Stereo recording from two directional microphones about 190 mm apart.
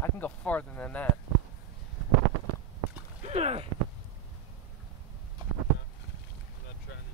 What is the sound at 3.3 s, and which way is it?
Speech, 35° right (ahead or behind).